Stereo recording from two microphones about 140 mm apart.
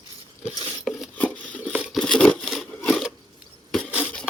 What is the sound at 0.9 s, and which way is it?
Cutlery, centre (ahead or behind).